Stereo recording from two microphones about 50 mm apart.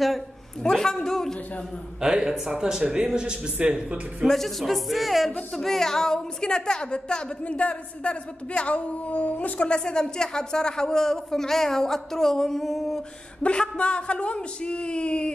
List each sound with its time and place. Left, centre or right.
0.7 s a woman's voice: centre
2.0 s speech: centre
4.3 s a woman's voice: centre; by 9.8 s left
9.8 s a woman's voice: centre
13.4 s a woman's voice: left